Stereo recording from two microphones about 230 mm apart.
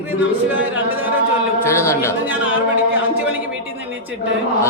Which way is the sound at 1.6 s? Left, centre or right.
Centre.